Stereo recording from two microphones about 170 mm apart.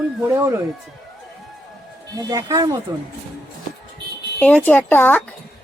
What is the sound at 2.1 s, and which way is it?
Speech, 20° right (ahead or behind).